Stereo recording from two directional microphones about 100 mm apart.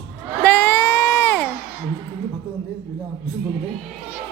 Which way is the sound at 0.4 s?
20° left (ahead or behind).